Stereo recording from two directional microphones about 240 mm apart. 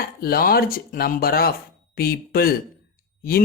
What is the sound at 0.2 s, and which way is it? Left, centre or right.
Speech, left.